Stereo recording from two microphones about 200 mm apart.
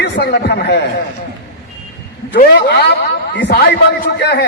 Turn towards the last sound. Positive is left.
turn(degrees=55)  # may be behind; listen again after turning